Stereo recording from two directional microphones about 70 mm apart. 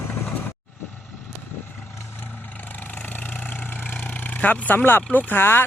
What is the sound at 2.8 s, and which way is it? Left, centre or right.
Vehicle, left.